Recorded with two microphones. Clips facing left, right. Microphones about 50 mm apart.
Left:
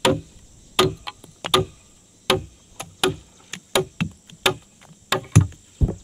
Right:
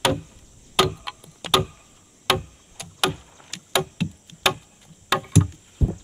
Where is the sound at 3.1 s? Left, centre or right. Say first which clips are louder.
Even; right.